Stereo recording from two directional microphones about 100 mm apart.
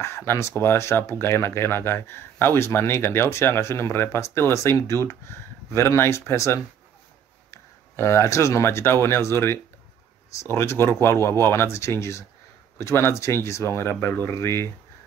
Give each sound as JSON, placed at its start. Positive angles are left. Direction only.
{"t": 0.0, "sound": "speech", "side_deg": 25}